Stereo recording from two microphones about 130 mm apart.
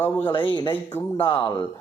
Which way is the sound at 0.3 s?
35° left (ahead or behind).